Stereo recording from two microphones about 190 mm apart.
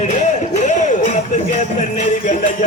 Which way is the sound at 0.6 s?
40° left (ahead or behind).